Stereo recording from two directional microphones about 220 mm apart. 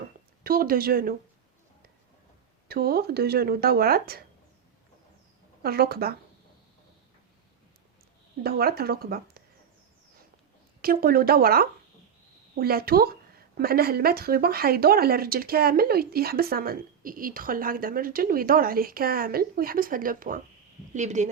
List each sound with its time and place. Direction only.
0.4 s speech: 40° right (ahead or behind)
2.6 s speech: 45° right (ahead or behind)
5.6 s speech: 45° right (ahead or behind)
8.4 s speech: 45° right (ahead or behind)
10.8 s speech: 45° right (ahead or behind)